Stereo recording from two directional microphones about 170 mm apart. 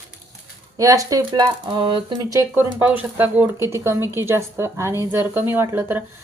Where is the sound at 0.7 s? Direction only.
20° right (ahead or behind).